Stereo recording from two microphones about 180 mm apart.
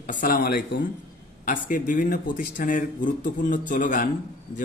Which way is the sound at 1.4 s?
50° left (ahead or behind).